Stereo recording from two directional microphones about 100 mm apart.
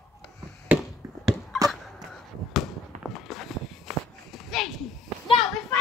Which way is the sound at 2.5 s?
Centre (ahead or behind).